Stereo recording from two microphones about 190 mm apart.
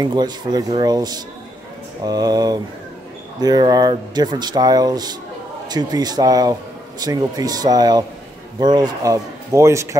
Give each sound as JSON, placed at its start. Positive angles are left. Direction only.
{"t": 0.0, "sound": "a man's voice", "side_deg": -20}